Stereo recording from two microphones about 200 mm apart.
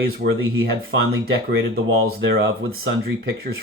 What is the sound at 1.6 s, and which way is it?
Speech, 70° right (ahead or behind).